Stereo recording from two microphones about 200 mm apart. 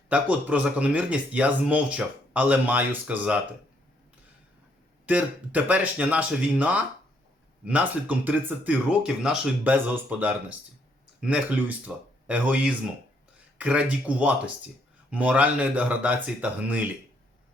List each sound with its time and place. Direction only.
0.1 s speech: 5° right (ahead or behind)
5.0 s speech: 5° right (ahead or behind)